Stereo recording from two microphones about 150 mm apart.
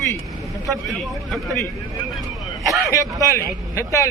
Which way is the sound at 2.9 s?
20° left (ahead or behind).